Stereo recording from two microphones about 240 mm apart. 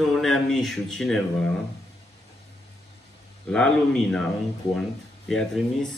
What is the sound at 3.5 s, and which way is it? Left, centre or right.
Speech, centre.